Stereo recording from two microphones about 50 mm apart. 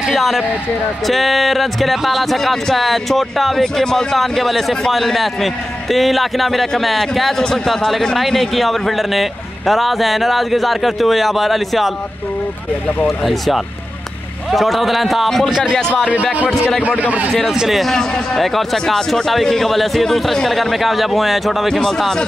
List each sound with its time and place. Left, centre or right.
0.0 s speech: centre
13.0 s speech: centre
17.0 s a man's voice: right
17.3 s speech: centre
17.9 s speech: centre